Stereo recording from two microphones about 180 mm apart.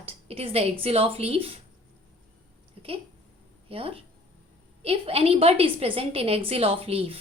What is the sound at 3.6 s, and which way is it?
A woman's voice, 30° right (ahead or behind).